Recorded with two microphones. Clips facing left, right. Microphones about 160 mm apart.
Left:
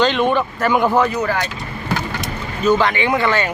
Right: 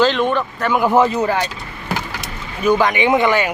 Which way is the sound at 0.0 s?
Centre (ahead or behind).